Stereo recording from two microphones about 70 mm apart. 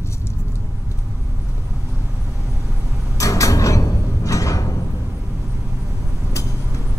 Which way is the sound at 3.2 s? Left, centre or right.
Left.